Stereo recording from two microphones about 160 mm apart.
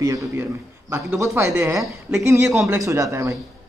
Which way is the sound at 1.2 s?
15° right (ahead or behind).